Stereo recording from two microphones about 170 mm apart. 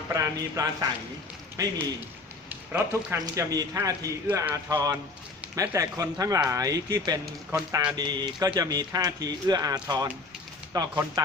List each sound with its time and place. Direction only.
0.1 s a man's voice: 20° right (ahead or behind)